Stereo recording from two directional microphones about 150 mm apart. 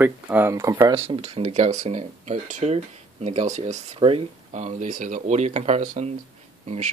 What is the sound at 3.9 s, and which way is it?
Speech, 35° right (ahead or behind).